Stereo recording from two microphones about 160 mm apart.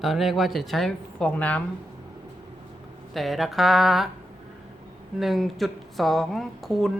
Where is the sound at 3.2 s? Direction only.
Centre (ahead or behind).